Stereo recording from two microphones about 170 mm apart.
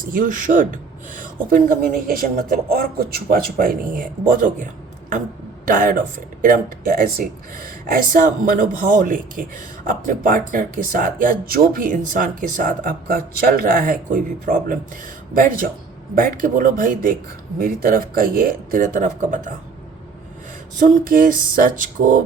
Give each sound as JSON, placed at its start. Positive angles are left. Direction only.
{"t": 0.0, "sound": "speech", "side_deg": -55}
{"t": 20.7, "sound": "speech", "side_deg": -50}